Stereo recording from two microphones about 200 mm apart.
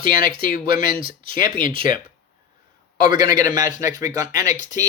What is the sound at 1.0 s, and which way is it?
Speech, 25° right (ahead or behind).